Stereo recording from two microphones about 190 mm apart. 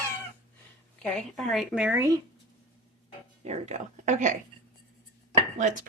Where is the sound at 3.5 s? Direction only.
35° right (ahead or behind).